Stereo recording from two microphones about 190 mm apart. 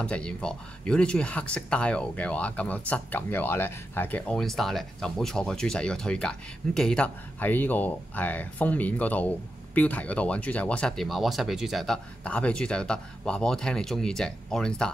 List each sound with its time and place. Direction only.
0.0 s speech: 5° left (ahead or behind)